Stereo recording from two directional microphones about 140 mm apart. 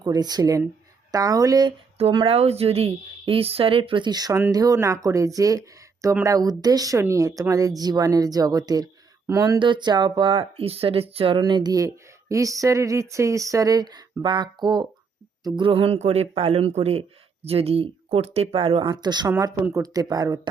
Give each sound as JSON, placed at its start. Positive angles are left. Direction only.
{"t": 0.0, "sound": "speech", "side_deg": -30}
{"t": 2.0, "sound": "speech", "side_deg": -40}
{"t": 9.6, "sound": "speech", "side_deg": -35}